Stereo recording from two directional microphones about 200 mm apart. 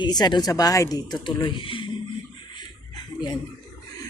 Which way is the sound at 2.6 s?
20° left (ahead or behind).